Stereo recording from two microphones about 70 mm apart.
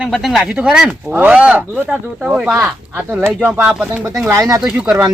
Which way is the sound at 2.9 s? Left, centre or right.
Right.